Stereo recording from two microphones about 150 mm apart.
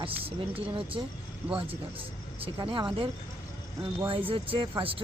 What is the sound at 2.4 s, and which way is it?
Speech, 35° right (ahead or behind).